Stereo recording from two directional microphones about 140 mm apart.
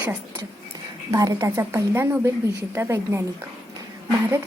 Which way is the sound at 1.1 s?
25° right (ahead or behind).